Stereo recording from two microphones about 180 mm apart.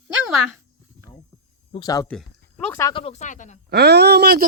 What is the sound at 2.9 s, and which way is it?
Speech, 35° left (ahead or behind).